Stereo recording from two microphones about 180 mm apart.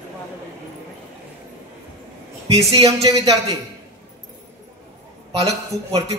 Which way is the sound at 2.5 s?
35° right (ahead or behind).